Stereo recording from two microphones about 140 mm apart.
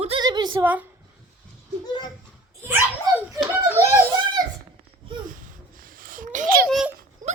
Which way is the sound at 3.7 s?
15° left (ahead or behind).